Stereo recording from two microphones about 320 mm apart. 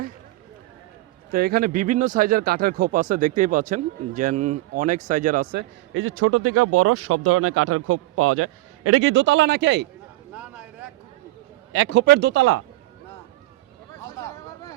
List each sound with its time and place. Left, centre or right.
1.3 s speech: right
10.3 s a sound: centre
11.7 s speech: right